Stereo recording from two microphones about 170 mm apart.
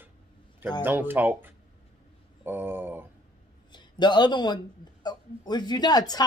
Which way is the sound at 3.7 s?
25° left (ahead or behind).